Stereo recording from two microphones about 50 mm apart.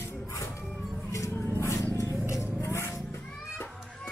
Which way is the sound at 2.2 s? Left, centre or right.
Left.